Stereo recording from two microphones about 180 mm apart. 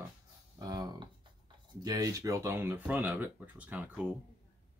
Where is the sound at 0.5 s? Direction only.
20° right (ahead or behind).